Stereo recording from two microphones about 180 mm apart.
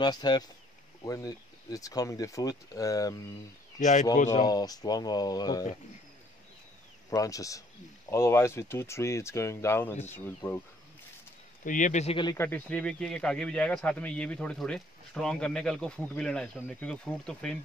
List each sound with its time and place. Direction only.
0.0 s speech: 25° left (ahead or behind)
3.8 s speech: 45° left (ahead or behind)
4.3 s speech: 20° left (ahead or behind)
7.1 s speech: 20° left (ahead or behind)
11.6 s speech: 45° left (ahead or behind)
12.2 s speech: 20° left (ahead or behind)
12.4 s speech: 10° left (ahead or behind)